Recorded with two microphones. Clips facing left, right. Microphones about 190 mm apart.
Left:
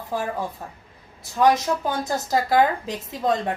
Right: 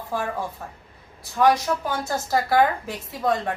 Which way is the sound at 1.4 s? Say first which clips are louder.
Left 1 dB; 20° left (ahead or behind).